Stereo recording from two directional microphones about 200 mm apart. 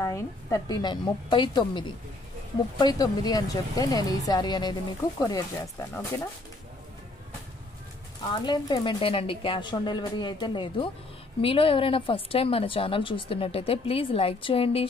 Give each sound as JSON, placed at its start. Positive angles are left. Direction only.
{"t": 0.0, "sound": "speech", "side_deg": 15}
{"t": 8.3, "sound": "speech", "side_deg": 20}